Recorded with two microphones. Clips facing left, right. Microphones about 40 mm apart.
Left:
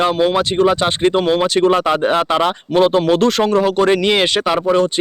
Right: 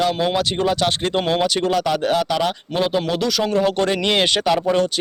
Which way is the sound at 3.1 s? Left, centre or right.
Left.